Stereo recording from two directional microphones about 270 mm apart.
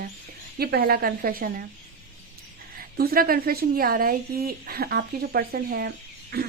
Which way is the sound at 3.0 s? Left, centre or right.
Right.